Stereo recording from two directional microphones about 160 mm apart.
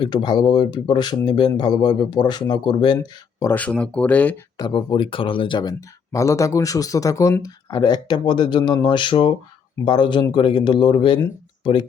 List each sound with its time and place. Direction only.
0.0 s speech: 30° left (ahead or behind)
3.4 s speech: 10° left (ahead or behind)
4.5 s speech: 30° left (ahead or behind)